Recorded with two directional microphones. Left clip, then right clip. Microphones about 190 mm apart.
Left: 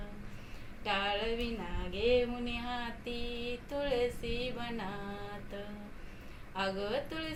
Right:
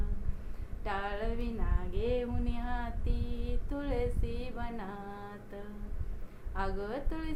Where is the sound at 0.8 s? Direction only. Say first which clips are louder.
Left 3 dB; 20° right (ahead or behind).